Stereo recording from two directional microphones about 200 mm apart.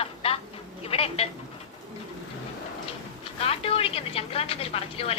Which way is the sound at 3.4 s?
30° left (ahead or behind).